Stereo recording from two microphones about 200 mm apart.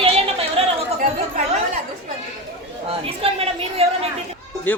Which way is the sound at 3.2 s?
30° right (ahead or behind).